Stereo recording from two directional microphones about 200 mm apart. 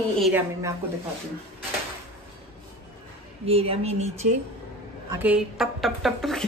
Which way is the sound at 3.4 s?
30° right (ahead or behind).